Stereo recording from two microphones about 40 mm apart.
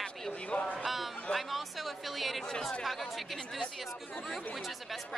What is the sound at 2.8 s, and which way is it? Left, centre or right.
A woman's voice, centre.